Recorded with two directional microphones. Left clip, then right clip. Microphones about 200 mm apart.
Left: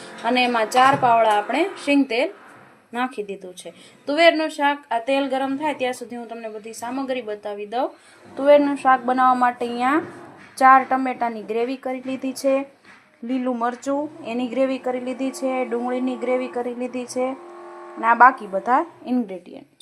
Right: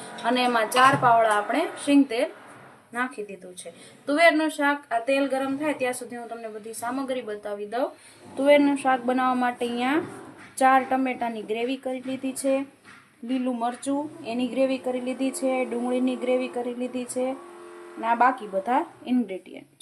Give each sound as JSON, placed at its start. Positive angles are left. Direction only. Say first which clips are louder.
{"t": 0.3, "sound": "a woman's voice", "louder": "left 3 dB", "side_deg": 15}
{"t": 8.4, "sound": "speech", "louder": "left 4 dB", "side_deg": 5}
{"t": 13.3, "sound": "speech", "louder": "left 4 dB", "side_deg": 15}